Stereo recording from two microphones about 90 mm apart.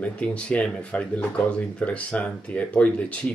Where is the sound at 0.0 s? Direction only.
15° left (ahead or behind).